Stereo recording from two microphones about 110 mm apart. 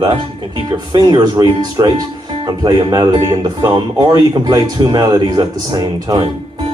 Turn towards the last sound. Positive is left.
turn(degrees=-35)  # may be behind; listen again after turning